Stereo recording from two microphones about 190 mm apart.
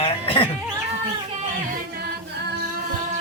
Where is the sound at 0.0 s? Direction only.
30° left (ahead or behind).